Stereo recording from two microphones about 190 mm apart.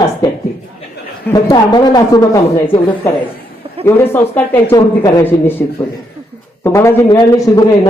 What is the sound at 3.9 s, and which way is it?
A man's voice, 10° left (ahead or behind).